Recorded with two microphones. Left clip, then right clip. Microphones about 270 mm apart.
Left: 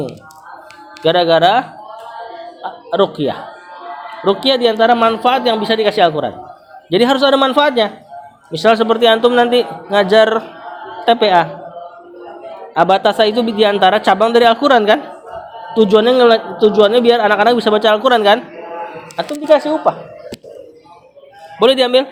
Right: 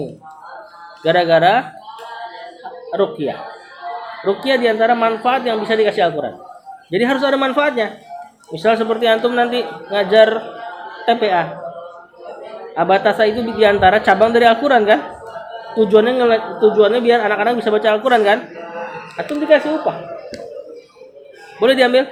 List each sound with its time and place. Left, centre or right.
1.0 s speech: left
2.9 s speech: left
4.4 s a woman's voice: left
12.7 s speech: left
21.6 s speech: left